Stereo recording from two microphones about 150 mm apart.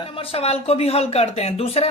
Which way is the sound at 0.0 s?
35° left (ahead or behind).